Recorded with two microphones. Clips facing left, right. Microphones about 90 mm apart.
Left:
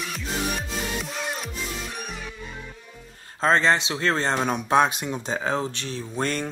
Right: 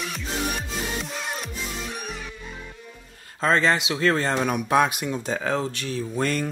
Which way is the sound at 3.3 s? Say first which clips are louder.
Left 1 dB; 30° left (ahead or behind).